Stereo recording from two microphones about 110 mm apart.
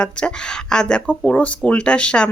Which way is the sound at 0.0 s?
10° left (ahead or behind).